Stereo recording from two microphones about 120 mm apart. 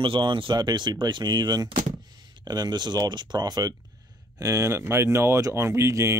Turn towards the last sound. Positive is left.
turn(degrees=-25)  # may be behind; listen again after turning